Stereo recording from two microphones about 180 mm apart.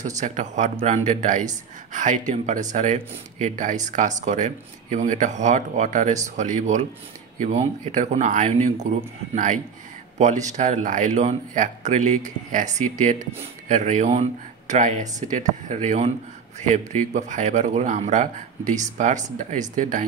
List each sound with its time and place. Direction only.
0.0 s speech: 40° right (ahead or behind)